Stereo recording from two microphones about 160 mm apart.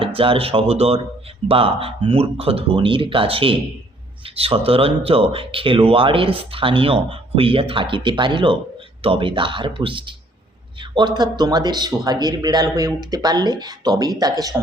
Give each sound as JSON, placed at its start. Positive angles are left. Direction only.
{"t": 0.0, "sound": "speech", "side_deg": -35}